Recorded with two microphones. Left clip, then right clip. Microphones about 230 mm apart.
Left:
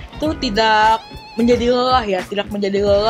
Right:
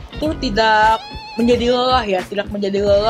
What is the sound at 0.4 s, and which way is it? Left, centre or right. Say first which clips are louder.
Speech: even; centre.